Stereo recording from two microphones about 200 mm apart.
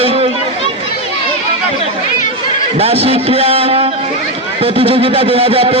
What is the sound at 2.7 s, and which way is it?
A man's voice, 30° right (ahead or behind).